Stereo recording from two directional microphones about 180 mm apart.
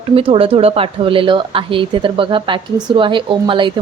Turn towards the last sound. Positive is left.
turn(degrees=-25)  # may be behind; listen again after turning